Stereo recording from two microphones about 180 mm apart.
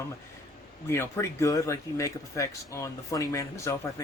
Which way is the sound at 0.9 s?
15° left (ahead or behind).